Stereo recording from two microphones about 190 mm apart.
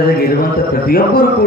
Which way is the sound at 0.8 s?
50° left (ahead or behind).